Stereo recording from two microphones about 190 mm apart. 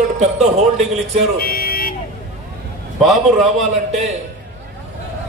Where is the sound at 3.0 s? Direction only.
Centre (ahead or behind).